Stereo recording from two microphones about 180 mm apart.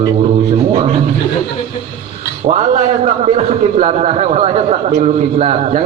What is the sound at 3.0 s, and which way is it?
Speech, 35° right (ahead or behind).